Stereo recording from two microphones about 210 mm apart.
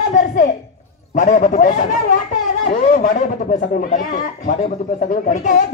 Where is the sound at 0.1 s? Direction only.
40° left (ahead or behind).